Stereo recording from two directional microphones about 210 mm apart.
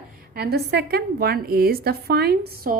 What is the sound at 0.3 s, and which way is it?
A woman's voice, 50° right (ahead or behind).